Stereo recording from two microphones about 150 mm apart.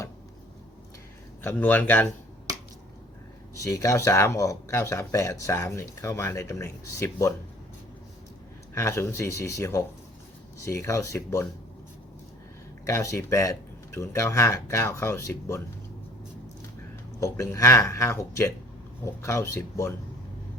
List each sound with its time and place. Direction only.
1.4 s speech: 10° left (ahead or behind)
3.6 s speech: 20° left (ahead or behind)
8.7 s speech: 20° left (ahead or behind)
12.8 s speech: 20° left (ahead or behind)
17.2 s speech: 20° left (ahead or behind)